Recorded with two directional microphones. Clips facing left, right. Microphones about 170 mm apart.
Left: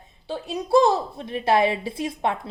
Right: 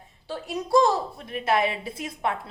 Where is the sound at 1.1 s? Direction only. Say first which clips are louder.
Left 4 dB; 30° left (ahead or behind).